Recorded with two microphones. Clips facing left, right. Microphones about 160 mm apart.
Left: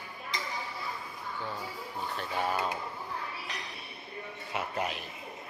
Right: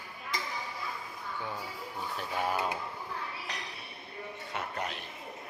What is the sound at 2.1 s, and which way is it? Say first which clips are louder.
Dishes: even; 5° right (ahead or behind).